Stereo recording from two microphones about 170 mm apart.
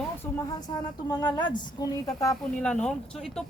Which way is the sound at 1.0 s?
25° left (ahead or behind).